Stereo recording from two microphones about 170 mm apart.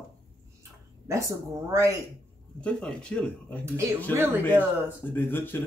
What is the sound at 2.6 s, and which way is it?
Speech, 5° left (ahead or behind).